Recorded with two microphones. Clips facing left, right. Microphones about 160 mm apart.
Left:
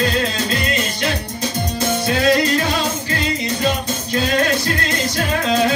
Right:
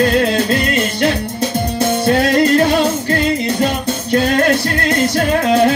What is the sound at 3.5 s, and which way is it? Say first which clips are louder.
Music: right 4 dB; 55° right (ahead or behind).